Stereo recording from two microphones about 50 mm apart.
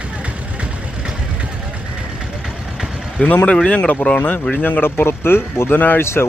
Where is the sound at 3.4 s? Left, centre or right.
Left.